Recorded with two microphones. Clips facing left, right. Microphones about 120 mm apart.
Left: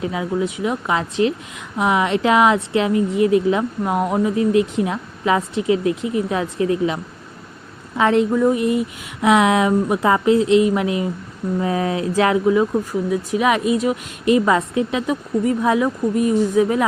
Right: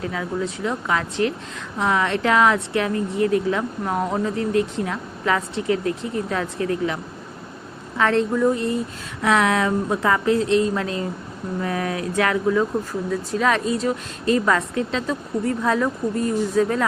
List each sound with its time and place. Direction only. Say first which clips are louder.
0.0 s speech: left 4 dB; 15° left (ahead or behind)